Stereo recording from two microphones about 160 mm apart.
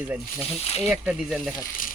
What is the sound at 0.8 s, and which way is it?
Speech, 5° right (ahead or behind).